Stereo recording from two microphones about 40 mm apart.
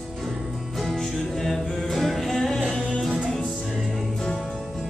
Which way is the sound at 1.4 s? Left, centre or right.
Centre.